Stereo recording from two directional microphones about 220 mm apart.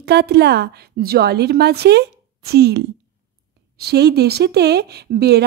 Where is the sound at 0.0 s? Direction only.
45° right (ahead or behind).